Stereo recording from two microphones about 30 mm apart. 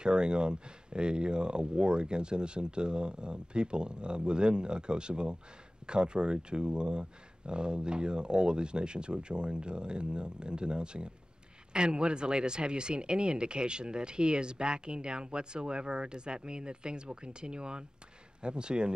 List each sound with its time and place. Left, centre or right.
0.0 s speech: right